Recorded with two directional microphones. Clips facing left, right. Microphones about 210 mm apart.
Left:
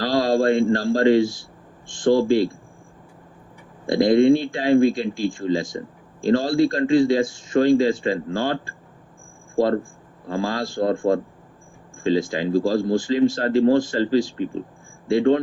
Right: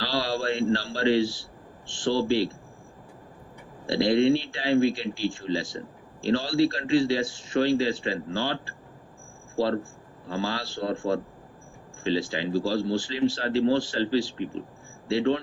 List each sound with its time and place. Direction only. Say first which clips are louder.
0.0 s a man's voice: left 9 dB; 45° left (ahead or behind)
3.8 s speech: left 6 dB; 45° left (ahead or behind)